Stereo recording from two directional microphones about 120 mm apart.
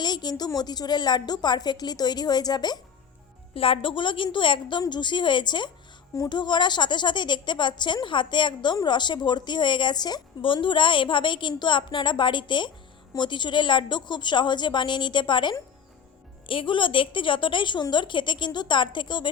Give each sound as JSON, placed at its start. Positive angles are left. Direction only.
{"t": 0.0, "sound": "a woman's voice", "side_deg": 35}
{"t": 3.5, "sound": "a woman's voice", "side_deg": 50}